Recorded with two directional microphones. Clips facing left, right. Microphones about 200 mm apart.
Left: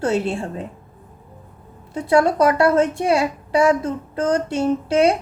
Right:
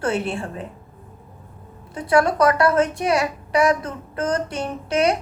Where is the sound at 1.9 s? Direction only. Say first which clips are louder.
Left 2 dB; 25° left (ahead or behind).